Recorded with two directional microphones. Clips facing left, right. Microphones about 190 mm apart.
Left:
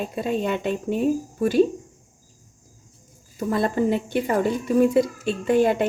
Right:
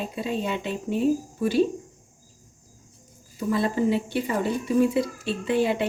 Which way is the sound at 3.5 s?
50° left (ahead or behind).